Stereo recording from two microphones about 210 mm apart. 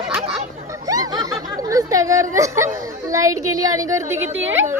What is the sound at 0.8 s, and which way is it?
A woman's voice, 15° right (ahead or behind).